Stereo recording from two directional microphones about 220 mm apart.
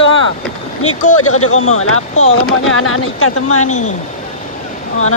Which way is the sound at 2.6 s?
70° left (ahead or behind).